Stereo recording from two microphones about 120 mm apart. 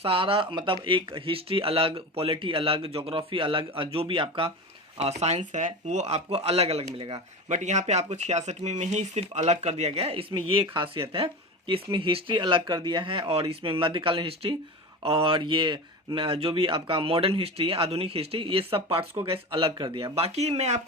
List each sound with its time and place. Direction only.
0.0 s speech: 50° right (ahead or behind)
4.9 s speech: 65° right (ahead or behind)
5.5 s speech: 85° right; by 7.2 s 55° right (ahead or behind)
7.4 s speech: 80° right; by 20.1 s 40° right (ahead or behind)
20.1 s speech: 60° right (ahead or behind)